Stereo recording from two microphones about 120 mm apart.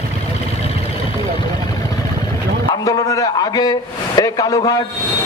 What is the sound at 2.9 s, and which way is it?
A man's voice, 30° left (ahead or behind).